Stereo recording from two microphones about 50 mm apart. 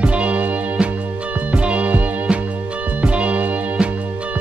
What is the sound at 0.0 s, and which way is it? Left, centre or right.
Music, right.